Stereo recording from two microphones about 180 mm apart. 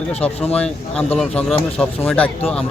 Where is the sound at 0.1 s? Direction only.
35° left (ahead or behind).